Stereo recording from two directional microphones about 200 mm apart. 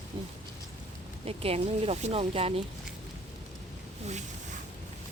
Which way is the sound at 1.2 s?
30° right (ahead or behind).